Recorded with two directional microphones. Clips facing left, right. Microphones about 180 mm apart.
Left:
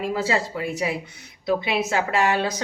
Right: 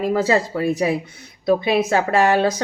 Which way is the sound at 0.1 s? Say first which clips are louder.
Right 7 dB; 45° right (ahead or behind).